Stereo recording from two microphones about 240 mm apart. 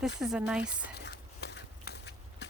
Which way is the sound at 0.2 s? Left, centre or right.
Centre.